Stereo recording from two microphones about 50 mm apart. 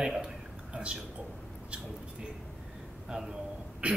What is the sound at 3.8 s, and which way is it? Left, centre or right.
Speech, right.